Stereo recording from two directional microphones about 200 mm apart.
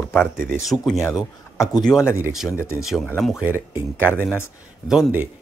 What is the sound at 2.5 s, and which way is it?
Speech, 15° left (ahead or behind).